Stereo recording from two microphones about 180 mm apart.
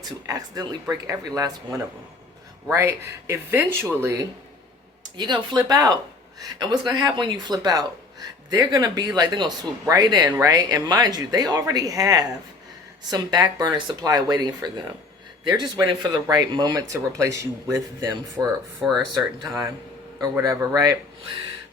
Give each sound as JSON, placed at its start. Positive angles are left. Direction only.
{"t": 0.3, "sound": "speech", "side_deg": -20}
{"t": 18.8, "sound": "speech", "side_deg": -5}
{"t": 19.1, "sound": "speech", "side_deg": -20}